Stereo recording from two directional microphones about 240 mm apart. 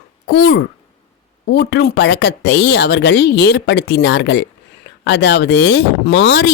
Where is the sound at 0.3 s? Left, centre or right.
Left.